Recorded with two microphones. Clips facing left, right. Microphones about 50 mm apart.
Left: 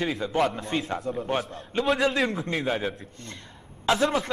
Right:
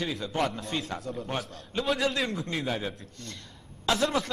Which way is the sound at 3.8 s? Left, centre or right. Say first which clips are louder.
Left 3 dB; left.